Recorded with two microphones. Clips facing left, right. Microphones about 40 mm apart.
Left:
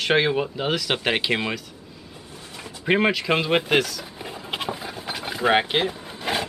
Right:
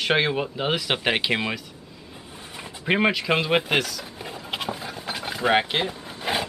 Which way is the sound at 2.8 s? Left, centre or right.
Centre.